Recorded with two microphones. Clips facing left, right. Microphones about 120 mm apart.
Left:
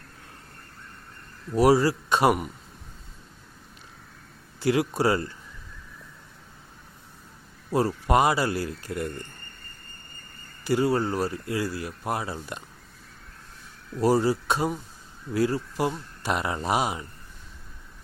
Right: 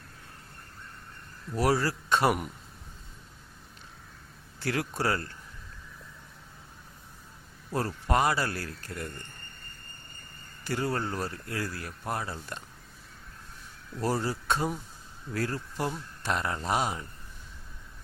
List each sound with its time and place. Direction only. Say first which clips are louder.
1.5 s speech: left 7 dB; 15° left (ahead or behind)
4.6 s speech: left 7 dB; 15° left (ahead or behind)
7.7 s speech: left 6 dB; 10° left (ahead or behind)
10.6 s speech: left 7 dB; 10° left (ahead or behind)
14.0 s speech: left 8 dB; 15° left (ahead or behind)